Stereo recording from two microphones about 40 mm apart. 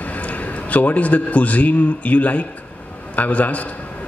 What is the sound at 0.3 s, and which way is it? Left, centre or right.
A man's voice, left.